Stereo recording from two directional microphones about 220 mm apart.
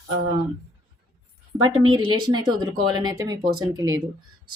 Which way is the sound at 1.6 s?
20° right (ahead or behind).